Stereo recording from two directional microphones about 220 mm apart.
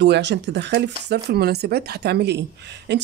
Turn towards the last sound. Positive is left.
turn(degrees=-50)  # may be behind; listen again after turning